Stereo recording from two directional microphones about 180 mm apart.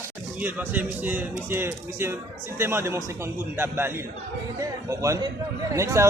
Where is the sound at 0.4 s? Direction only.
10° right (ahead or behind).